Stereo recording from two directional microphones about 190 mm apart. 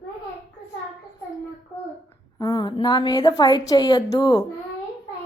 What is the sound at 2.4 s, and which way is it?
A woman's voice, 20° left (ahead or behind).